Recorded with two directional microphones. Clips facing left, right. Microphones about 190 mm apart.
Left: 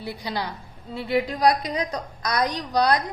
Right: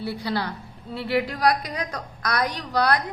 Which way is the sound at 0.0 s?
15° left (ahead or behind).